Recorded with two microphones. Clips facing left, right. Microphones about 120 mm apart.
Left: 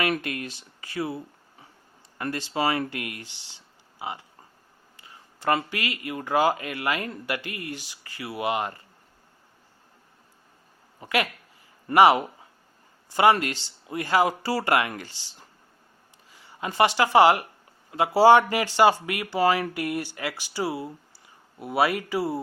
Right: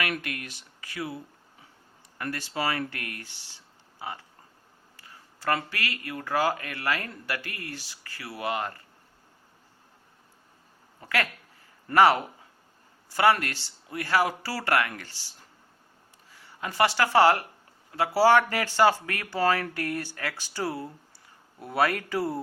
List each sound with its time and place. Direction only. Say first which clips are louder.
0.0 s speech: left 5 dB; 25° left (ahead or behind)
11.0 s speech: left 3 dB; 15° left (ahead or behind)